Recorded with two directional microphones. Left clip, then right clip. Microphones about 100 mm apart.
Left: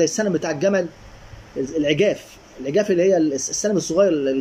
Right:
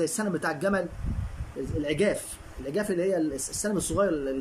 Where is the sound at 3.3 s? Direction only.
20° right (ahead or behind).